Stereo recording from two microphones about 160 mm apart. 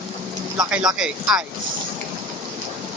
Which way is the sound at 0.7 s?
5° right (ahead or behind).